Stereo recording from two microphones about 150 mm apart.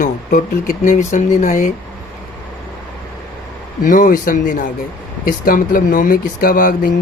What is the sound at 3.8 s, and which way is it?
Speech, 60° left (ahead or behind).